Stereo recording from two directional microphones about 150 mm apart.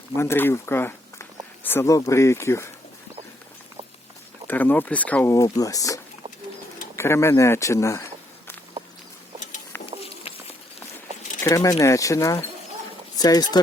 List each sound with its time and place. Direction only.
0.2 s speech: 15° left (ahead or behind)
4.4 s speech: 10° left (ahead or behind)
5.3 s speech: 20° left (ahead or behind)
11.4 s speech: 20° left (ahead or behind)